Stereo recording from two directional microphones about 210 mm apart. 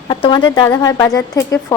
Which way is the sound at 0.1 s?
20° left (ahead or behind).